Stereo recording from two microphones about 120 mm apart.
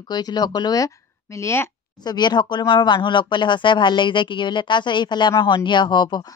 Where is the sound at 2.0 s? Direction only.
35° left (ahead or behind).